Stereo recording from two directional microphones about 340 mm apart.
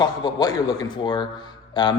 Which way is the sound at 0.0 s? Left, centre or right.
Centre.